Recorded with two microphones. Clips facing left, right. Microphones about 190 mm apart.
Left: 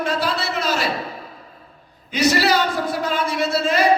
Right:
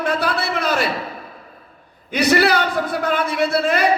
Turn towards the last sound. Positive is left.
turn(degrees=-60)  # may be behind; listen again after turning